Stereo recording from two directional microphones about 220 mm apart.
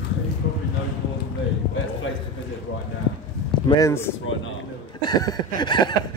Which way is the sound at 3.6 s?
15° left (ahead or behind).